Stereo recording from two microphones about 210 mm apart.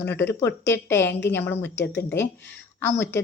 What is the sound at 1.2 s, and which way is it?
A woman's voice, 10° left (ahead or behind).